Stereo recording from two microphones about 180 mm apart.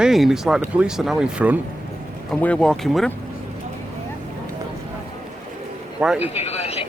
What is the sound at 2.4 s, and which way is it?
Speech, 5° left (ahead or behind).